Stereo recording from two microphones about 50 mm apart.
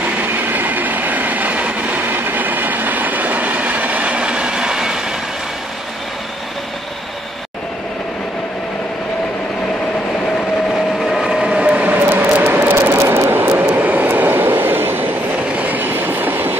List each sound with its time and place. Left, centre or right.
0.2 s train: right; by 5.0 s centre
10.7 s vehicle: centre
11.4 s train: centre
11.8 s vehicle: right
12.4 s a sound: right
12.9 s vehicle: right
13.3 s vehicle: right
13.7 s vehicle: right
15.5 s train: right